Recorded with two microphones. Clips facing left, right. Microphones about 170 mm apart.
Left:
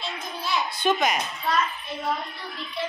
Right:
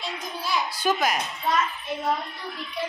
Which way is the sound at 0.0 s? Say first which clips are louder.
Even; 10° right (ahead or behind).